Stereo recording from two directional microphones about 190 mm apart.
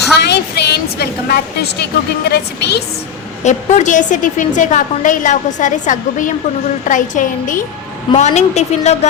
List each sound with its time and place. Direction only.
0.2 s a woman's voice: 60° left (ahead or behind)
3.4 s a woman's voice: 35° left (ahead or behind)